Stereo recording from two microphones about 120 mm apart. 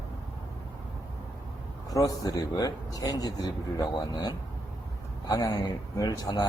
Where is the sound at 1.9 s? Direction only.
30° left (ahead or behind).